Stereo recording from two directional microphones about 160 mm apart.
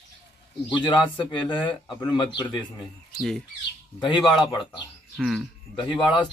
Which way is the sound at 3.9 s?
25° left (ahead or behind).